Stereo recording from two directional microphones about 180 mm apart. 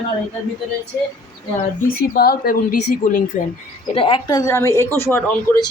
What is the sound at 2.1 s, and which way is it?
A woman's voice, 60° left (ahead or behind).